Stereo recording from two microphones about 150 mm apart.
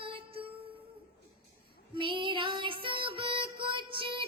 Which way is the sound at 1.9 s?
35° right (ahead or behind).